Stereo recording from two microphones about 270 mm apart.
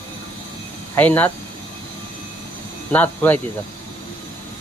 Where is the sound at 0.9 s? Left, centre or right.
Centre.